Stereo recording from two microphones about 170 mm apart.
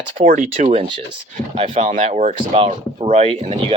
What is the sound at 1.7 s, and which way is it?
Speech, 45° right (ahead or behind).